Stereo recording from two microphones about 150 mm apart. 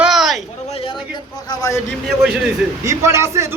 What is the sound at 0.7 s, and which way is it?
Speech, 40° left (ahead or behind).